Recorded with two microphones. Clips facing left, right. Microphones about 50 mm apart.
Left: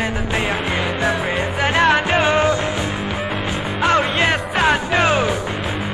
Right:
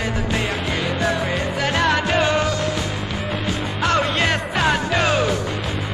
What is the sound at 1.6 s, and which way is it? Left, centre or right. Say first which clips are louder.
Music: left 4 dB; left.